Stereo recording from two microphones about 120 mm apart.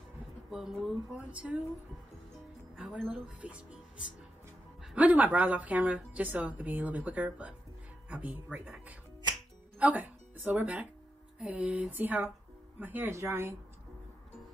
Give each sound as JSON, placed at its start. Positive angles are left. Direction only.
{"t": 0.5, "sound": "speech", "side_deg": 0}
{"t": 2.7, "sound": "a woman's voice", "side_deg": -10}
{"t": 4.9, "sound": "a woman's voice", "side_deg": -15}